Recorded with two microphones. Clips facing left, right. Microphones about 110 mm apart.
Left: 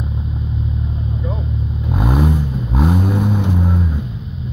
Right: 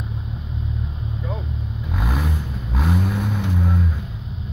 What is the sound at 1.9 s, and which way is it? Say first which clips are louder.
Vehicle: left 9 dB; 30° left (ahead or behind).